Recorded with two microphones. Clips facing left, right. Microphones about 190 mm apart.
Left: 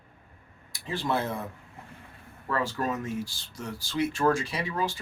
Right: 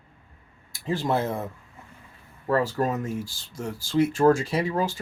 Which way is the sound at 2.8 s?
35° right (ahead or behind).